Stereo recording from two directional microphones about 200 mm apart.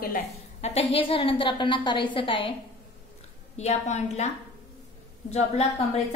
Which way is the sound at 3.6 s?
35° left (ahead or behind).